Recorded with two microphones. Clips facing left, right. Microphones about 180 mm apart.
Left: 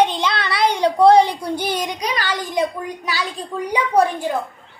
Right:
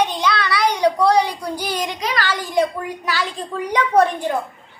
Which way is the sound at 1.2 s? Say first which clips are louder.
Left 2 dB; 25° left (ahead or behind).